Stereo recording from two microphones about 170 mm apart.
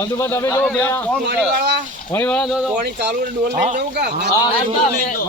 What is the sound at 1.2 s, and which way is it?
Speech, 85° right.